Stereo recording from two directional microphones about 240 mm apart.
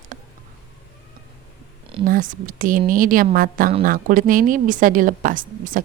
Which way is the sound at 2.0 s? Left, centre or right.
Right.